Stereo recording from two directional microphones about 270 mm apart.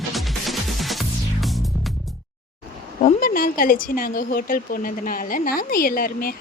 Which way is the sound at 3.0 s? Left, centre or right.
Left.